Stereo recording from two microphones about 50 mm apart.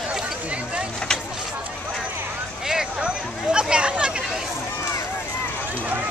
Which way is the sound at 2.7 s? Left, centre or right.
Centre.